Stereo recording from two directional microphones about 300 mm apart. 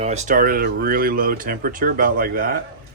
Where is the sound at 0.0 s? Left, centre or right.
Right.